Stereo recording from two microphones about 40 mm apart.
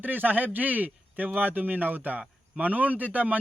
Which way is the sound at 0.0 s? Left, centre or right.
Right.